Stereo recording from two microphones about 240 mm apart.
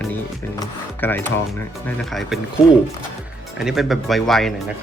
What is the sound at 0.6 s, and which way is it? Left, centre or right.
Speech, centre.